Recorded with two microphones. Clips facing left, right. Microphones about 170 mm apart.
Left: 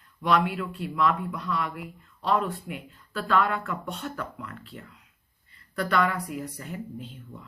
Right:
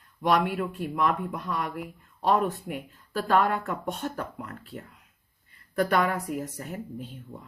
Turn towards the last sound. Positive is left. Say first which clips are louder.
# right 1 dB
turn(degrees=-45)  # may be behind; listen again after turning